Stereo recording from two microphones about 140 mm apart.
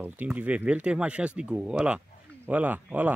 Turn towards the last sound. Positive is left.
turn(degrees=-10)  # may be behind; listen again after turning